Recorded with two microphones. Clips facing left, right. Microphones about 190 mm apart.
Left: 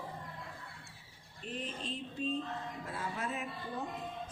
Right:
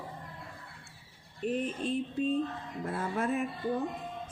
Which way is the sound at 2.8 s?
50° right (ahead or behind).